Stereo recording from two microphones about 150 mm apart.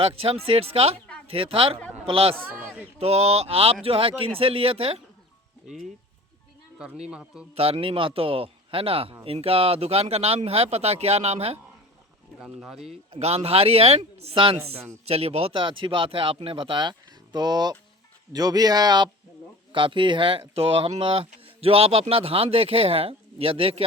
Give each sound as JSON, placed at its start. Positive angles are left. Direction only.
{"t": 0.0, "sound": "speech", "side_deg": -40}
{"t": 2.6, "sound": "a sound", "side_deg": -10}
{"t": 3.0, "sound": "speech", "side_deg": -45}
{"t": 6.7, "sound": "a man's voice", "side_deg": -5}
{"t": 7.5, "sound": "speech", "side_deg": -40}
{"t": 12.4, "sound": "speech", "side_deg": 0}
{"t": 13.1, "sound": "speech", "side_deg": -45}